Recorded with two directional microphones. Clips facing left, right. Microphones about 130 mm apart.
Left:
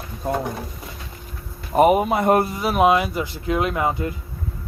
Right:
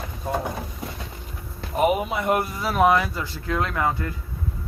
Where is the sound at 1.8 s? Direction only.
45° left (ahead or behind).